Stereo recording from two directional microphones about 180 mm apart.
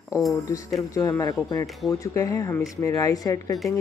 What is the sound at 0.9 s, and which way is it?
Speech, 20° left (ahead or behind).